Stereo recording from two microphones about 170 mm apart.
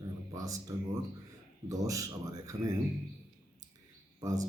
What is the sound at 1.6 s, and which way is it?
A man's voice, 20° right (ahead or behind).